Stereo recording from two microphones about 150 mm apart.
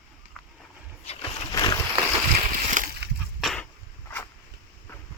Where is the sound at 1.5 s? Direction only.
30° left (ahead or behind).